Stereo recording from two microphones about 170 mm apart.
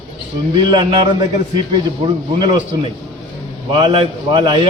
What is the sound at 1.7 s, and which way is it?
Speech, 30° right (ahead or behind).